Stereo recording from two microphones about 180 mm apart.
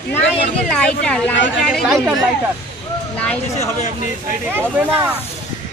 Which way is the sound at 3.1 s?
5° left (ahead or behind).